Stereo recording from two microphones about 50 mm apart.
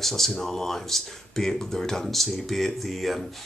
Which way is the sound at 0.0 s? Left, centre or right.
Centre.